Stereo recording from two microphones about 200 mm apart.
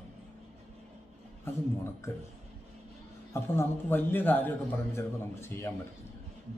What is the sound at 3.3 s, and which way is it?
A man's voice, 10° left (ahead or behind).